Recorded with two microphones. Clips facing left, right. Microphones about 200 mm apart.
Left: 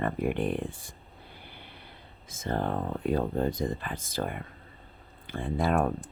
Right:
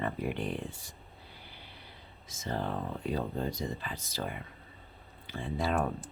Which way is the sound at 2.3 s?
55° left (ahead or behind).